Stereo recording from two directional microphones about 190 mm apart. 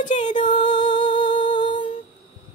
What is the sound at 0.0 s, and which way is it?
Music, 40° left (ahead or behind).